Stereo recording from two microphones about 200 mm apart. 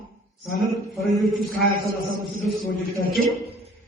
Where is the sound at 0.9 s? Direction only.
Centre (ahead or behind).